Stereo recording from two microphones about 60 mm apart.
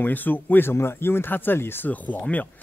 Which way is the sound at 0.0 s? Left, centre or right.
Left.